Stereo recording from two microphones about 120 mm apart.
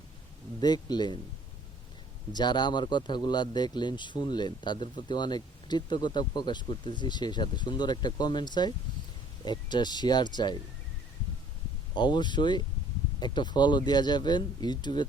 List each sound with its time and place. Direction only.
0.6 s a man's voice: 35° left (ahead or behind)
2.3 s a man's voice: 35° left (ahead or behind)
11.9 s a man's voice: 40° left (ahead or behind)